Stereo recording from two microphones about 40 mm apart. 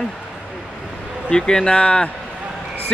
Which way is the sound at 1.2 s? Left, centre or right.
Centre.